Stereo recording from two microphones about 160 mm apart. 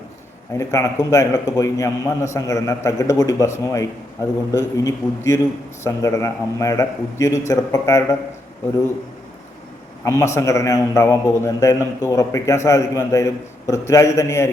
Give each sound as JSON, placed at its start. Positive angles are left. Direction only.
{"t": 0.5, "sound": "a man's voice", "side_deg": 20}
{"t": 10.0, "sound": "a man's voice", "side_deg": 20}